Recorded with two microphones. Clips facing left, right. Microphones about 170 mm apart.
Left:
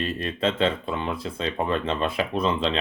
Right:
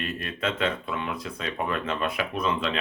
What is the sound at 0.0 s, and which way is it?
Speech, 30° left (ahead or behind).